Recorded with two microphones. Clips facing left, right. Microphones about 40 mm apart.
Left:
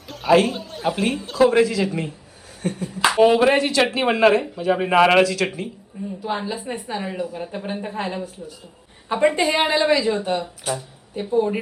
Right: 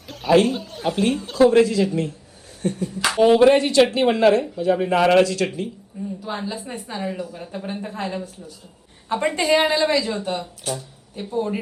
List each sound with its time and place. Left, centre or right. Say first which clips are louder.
0.1 s a man's voice: even; centre
5.2 s speech: even; centre
6.2 s speech: left 5 dB; centre